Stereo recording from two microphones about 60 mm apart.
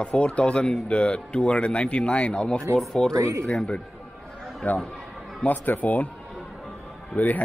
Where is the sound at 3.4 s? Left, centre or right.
Centre.